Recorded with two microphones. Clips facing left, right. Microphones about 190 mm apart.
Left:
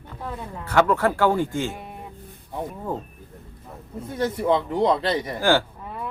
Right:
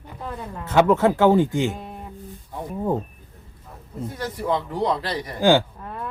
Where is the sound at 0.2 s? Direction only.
Centre (ahead or behind).